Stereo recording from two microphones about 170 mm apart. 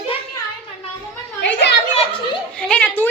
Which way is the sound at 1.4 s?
90° left.